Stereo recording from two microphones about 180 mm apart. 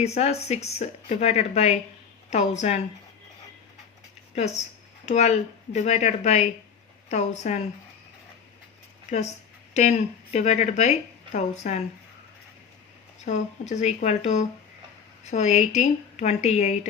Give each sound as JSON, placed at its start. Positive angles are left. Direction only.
{"t": 0.0, "sound": "a woman's voice", "side_deg": 35}
{"t": 4.4, "sound": "a woman's voice", "side_deg": 40}
{"t": 9.7, "sound": "a woman's voice", "side_deg": 40}
{"t": 13.2, "sound": "a woman's voice", "side_deg": 40}